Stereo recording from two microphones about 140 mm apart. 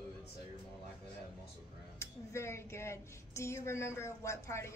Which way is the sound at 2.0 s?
20° left (ahead or behind).